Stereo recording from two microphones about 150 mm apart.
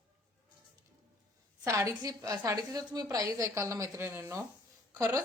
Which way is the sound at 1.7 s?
25° right (ahead or behind).